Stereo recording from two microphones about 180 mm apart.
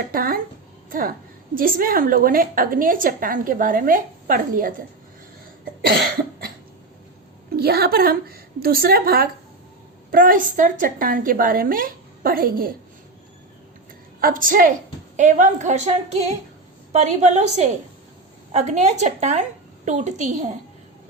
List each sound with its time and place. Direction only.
0.1 s a sound: 55° right (ahead or behind)
0.9 s a woman's voice: 50° right (ahead or behind)
7.5 s a woman's voice: 60° right (ahead or behind)
14.2 s a woman's voice: 50° right (ahead or behind)